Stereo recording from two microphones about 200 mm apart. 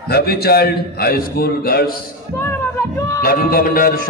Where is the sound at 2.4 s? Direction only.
10° left (ahead or behind).